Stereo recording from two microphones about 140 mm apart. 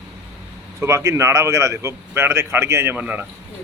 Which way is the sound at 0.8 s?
20° right (ahead or behind).